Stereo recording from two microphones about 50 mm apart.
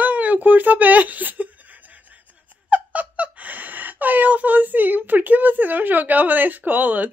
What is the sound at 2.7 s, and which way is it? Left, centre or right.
Speech, right.